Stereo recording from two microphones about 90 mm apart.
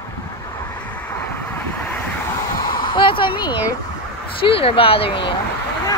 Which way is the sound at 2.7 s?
65° left (ahead or behind).